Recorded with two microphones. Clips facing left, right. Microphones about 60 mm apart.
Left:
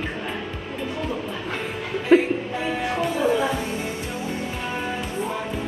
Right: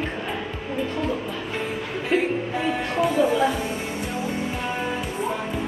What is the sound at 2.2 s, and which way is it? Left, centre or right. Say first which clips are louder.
Music: even; centre.